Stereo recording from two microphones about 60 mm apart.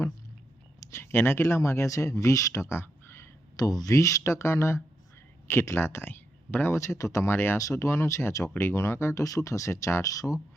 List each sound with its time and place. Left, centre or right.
0.9 s a sound: left
1.1 s speech: left
3.6 s speech: left
3.9 s speech: left
4.2 s speech: left
6.7 s speech: left
7.3 s speech: left
7.6 s speech: left
8.5 s speech: left
9.2 s speech: left